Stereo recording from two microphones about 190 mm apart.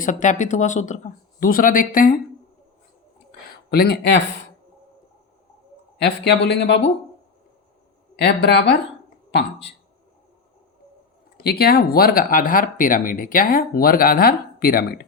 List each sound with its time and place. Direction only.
0.0 s speech: 40° left (ahead or behind)
3.7 s speech: 55° left (ahead or behind)
6.0 s speech: 60° left (ahead or behind)
8.2 s speech: 60° left (ahead or behind)
11.3 s speech: 55° left (ahead or behind)